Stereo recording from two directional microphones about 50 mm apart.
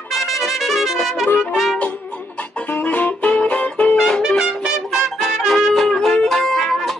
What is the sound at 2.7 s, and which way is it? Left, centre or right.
Music, left.